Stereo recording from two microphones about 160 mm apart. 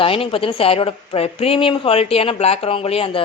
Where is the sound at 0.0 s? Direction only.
35° left (ahead or behind).